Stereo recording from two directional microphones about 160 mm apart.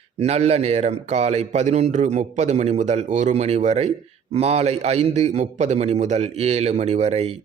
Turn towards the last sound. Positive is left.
turn(degrees=-40)  # may be behind; listen again after turning